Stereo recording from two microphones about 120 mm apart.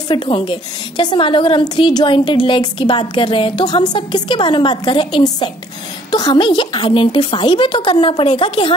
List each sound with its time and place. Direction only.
0.1 s a woman's voice: 45° left (ahead or behind)